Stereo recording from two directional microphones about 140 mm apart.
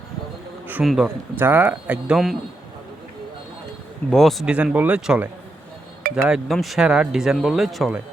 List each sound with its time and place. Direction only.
0.9 s speech: 5° right (ahead or behind)
1.4 s speech: 15° right (ahead or behind)
4.1 s speech: centre (ahead or behind)
6.0 s chink: 90° right
6.2 s speech: 5° right (ahead or behind)